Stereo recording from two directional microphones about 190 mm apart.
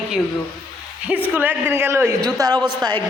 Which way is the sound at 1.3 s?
10° right (ahead or behind).